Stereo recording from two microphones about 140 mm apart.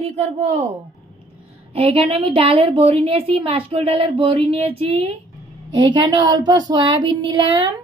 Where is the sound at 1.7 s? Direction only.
45° right (ahead or behind).